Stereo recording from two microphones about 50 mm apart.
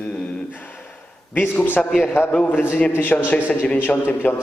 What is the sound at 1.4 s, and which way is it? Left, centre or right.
A man's voice, left.